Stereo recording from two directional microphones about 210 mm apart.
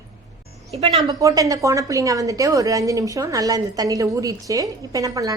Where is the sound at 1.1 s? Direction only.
15° right (ahead or behind).